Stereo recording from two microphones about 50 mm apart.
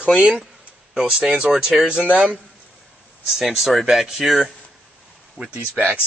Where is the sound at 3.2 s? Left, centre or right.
Centre.